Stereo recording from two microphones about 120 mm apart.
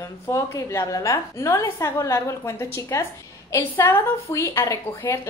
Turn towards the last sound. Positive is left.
turn(degrees=20)  # may be behind; listen again after turning